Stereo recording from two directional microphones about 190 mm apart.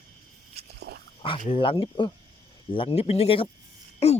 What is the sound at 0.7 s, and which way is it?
Pig, 60° right (ahead or behind).